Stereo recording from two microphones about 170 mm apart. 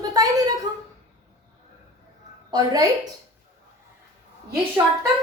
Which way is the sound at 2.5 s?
20° right (ahead or behind).